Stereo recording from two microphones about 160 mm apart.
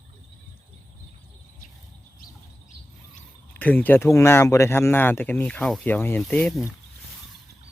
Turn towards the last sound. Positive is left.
turn(degrees=10)  # may be behind; listen again after turning